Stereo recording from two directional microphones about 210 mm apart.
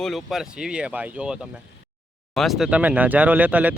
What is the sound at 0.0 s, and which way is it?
A man's voice, centre (ahead or behind).